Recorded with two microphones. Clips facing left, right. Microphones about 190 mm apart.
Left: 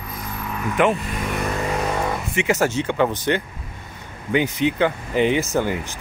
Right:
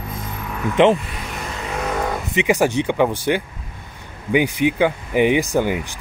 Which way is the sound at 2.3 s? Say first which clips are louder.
Right 4 dB; 15° right (ahead or behind).